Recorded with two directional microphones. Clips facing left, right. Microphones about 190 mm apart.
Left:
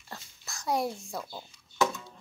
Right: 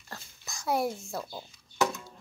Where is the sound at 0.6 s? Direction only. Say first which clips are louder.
Right 1 dB; 5° right (ahead or behind).